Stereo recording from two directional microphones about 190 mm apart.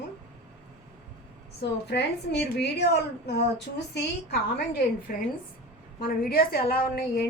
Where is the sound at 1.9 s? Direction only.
60° left (ahead or behind).